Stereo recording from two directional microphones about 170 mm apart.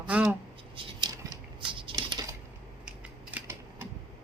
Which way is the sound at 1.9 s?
25° right (ahead or behind).